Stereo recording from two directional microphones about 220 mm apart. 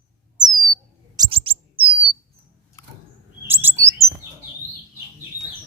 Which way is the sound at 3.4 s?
10° right (ahead or behind).